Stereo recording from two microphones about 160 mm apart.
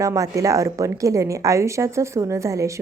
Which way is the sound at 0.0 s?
20° right (ahead or behind).